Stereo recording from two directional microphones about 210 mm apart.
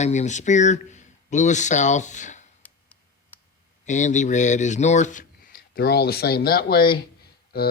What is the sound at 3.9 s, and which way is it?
Speech, 35° left (ahead or behind).